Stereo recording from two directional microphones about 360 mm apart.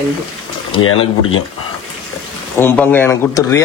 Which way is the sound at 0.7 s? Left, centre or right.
Left.